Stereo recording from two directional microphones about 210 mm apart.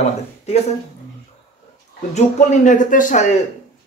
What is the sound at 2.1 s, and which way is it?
A man's voice, 35° left (ahead or behind).